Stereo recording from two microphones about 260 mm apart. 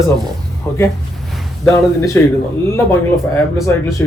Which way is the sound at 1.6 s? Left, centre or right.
Centre.